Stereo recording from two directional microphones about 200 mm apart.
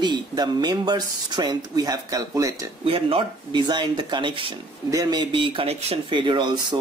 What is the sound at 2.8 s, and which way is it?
Speech, 30° right (ahead or behind).